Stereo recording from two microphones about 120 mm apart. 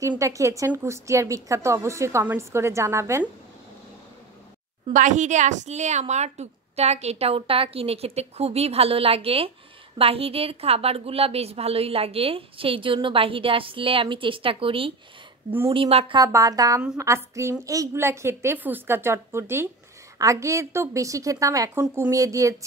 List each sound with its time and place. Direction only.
0.2 s a woman's voice: 25° right (ahead or behind)
4.9 s a woman's voice: 90° right; by 16.2 s 50° right (ahead or behind)
16.2 s a woman's voice: 30° right (ahead or behind)